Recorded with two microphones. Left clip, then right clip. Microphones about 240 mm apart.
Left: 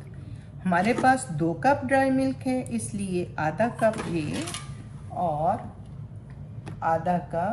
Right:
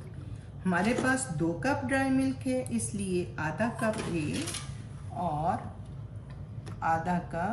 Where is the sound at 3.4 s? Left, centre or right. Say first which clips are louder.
Left 11 dB; centre.